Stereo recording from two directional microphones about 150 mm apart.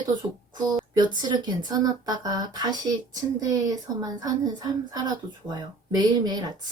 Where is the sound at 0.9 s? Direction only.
30° right (ahead or behind).